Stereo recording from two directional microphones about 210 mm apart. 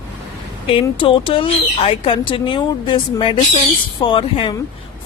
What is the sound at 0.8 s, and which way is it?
Speech, 20° left (ahead or behind).